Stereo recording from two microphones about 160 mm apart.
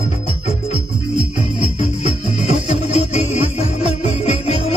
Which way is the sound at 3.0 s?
40° left (ahead or behind).